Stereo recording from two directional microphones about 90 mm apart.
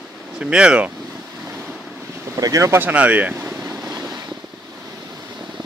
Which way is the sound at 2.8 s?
15° right (ahead or behind).